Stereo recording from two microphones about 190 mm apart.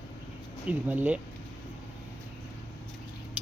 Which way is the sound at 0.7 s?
10° right (ahead or behind).